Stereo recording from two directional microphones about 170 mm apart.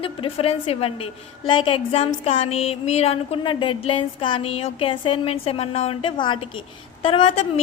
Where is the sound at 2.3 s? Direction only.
35° left (ahead or behind).